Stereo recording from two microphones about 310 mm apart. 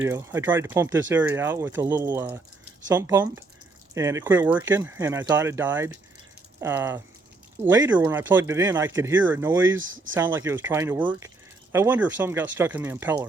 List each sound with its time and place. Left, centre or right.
0.0 s speech: centre
9.6 s speech: right
10.2 s speech: centre